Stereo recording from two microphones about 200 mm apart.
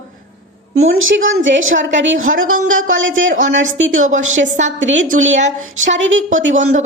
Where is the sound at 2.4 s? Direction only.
90° right.